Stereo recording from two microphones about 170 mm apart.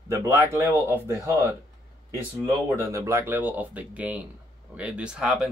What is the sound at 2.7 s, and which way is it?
Speech, 15° right (ahead or behind).